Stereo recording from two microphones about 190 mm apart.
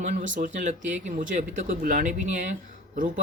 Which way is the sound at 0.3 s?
40° right (ahead or behind).